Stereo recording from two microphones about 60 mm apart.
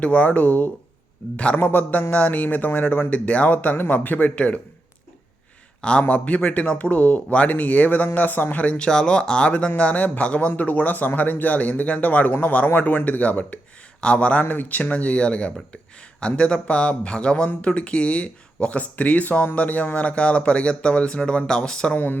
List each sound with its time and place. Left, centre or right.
0.0 s a man's voice: left
5.8 s a man's voice: centre
21.9 s speech: left